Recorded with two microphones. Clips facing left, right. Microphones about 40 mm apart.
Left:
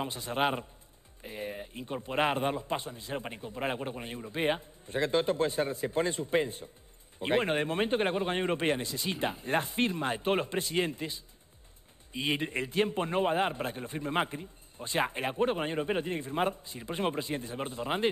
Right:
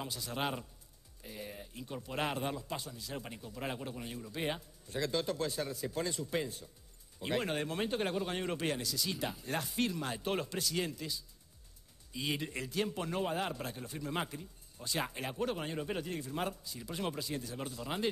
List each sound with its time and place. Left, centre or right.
0.0 s a man's voice: left